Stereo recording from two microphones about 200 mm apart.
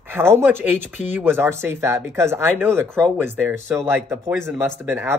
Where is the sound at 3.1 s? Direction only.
10° right (ahead or behind).